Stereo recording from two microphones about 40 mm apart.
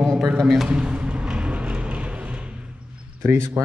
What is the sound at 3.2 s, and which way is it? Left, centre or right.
Speech, right.